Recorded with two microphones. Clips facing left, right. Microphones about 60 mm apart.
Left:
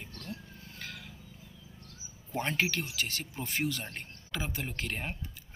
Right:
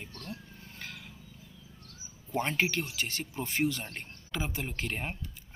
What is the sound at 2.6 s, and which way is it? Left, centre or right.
Speech, right.